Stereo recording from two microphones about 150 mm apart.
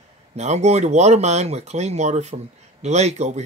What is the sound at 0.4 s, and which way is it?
A man's voice, 50° right (ahead or behind).